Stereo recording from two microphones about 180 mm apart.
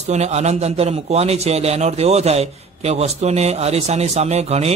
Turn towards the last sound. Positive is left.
turn(degrees=-35)  # may be behind; listen again after turning